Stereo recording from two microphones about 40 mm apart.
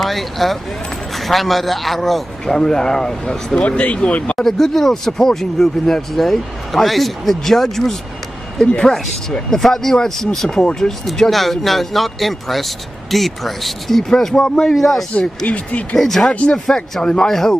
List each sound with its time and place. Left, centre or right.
0.0 s speech: centre
2.4 s speech: centre
3.6 s speech: left
4.4 s speech: centre
9.5 s speech: centre
10.6 s speech: centre
15.1 s speech: left
16.0 s speech: centre
16.3 s speech: left
16.6 s speech: centre